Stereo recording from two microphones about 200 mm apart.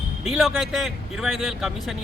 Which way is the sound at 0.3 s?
Centre (ahead or behind).